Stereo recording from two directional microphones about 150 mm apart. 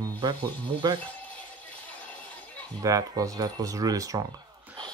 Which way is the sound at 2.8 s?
25° right (ahead or behind).